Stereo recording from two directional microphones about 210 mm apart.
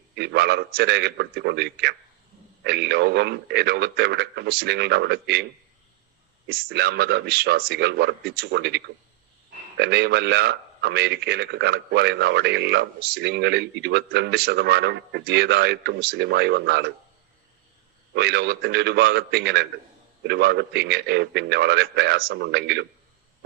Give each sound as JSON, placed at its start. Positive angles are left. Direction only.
{"t": 0.2, "sound": "a man's voice", "side_deg": -50}
{"t": 6.5, "sound": "a man's voice", "side_deg": -45}
{"t": 18.1, "sound": "a man's voice", "side_deg": -50}